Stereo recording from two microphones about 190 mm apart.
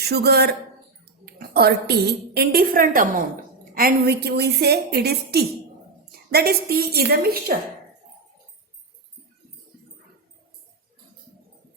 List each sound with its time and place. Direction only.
0.0 s a woman's voice: 60° right (ahead or behind)